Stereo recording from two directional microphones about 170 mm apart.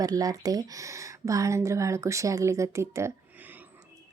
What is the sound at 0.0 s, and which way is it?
Speech, 20° right (ahead or behind).